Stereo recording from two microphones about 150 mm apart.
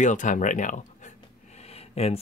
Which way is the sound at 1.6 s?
45° left (ahead or behind).